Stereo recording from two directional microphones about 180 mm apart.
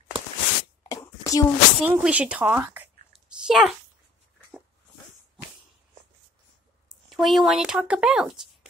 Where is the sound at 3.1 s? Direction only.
Centre (ahead or behind).